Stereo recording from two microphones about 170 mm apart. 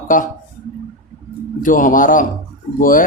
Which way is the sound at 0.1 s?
50° left (ahead or behind).